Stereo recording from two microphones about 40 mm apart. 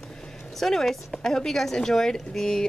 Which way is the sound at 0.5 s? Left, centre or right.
Centre.